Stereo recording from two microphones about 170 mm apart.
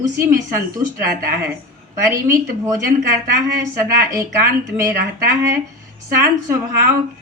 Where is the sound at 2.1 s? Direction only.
20° right (ahead or behind).